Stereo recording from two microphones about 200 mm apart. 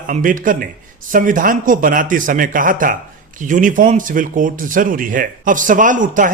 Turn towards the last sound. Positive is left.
turn(degrees=-40)  # may be behind; listen again after turning